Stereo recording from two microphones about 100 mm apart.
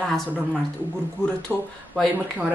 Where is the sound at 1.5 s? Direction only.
20° right (ahead or behind).